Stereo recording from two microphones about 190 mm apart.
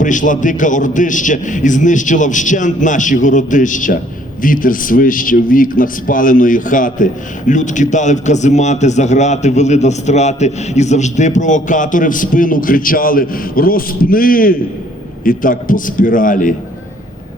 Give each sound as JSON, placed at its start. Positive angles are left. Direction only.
{"t": 0.0, "sound": "a man's voice", "side_deg": 40}